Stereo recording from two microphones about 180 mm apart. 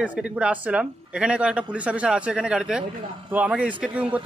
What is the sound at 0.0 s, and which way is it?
A man's voice, 5° right (ahead or behind).